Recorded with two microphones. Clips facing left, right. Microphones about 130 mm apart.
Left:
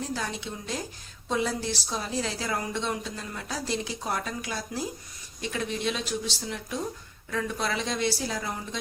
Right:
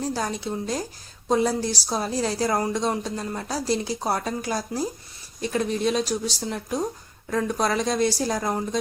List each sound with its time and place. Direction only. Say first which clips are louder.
0.0 s a woman's voice: right 5 dB; 35° right (ahead or behind)